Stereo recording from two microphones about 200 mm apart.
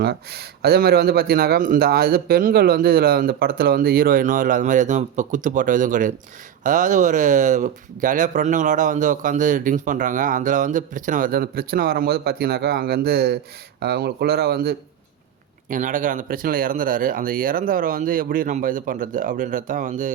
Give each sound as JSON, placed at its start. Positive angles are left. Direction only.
{"t": 0.0, "sound": "a man's voice", "side_deg": -55}